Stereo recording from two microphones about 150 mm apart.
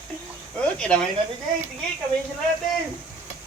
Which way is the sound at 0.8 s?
5° left (ahead or behind).